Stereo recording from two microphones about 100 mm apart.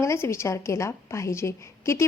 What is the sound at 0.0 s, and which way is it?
A woman's voice, 30° left (ahead or behind).